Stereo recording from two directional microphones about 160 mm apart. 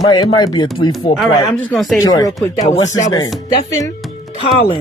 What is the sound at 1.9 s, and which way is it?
Speech, 20° left (ahead or behind).